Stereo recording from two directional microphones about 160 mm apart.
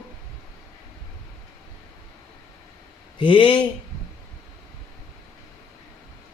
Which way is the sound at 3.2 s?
30° left (ahead or behind).